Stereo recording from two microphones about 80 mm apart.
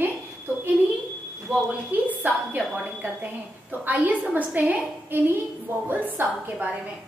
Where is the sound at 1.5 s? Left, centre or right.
Centre.